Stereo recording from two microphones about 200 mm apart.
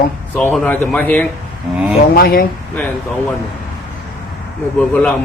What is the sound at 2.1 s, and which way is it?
Speech, 45° left (ahead or behind).